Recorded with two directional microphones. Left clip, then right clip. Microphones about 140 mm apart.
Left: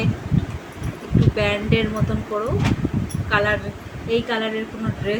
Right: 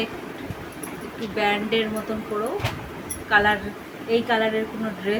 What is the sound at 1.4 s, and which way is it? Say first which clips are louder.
Speech: right 1 dB; 5° left (ahead or behind).